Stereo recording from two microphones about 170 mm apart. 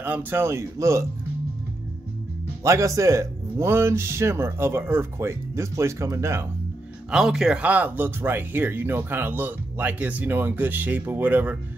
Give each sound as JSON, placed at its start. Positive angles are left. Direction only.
{"t": 0.0, "sound": "speech", "side_deg": -10}
{"t": 2.6, "sound": "speech", "side_deg": -15}
{"t": 7.1, "sound": "speech", "side_deg": -5}